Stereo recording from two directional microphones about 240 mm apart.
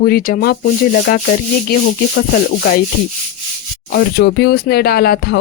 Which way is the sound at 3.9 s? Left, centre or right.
Left.